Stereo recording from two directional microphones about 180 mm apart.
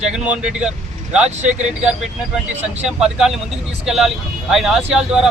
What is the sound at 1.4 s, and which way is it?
Speech, 40° right (ahead or behind).